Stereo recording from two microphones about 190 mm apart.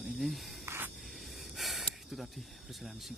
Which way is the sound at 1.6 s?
Centre (ahead or behind).